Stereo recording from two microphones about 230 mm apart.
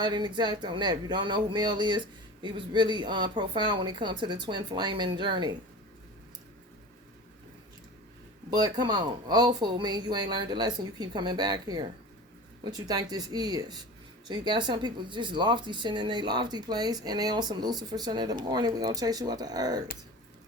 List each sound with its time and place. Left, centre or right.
0.0 s speech: centre
8.4 s speech: centre